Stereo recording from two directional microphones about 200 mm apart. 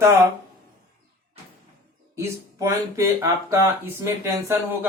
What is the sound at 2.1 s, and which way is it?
Speech, 15° right (ahead or behind).